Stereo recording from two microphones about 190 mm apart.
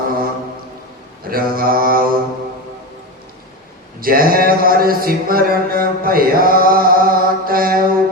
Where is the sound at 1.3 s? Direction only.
50° right (ahead or behind).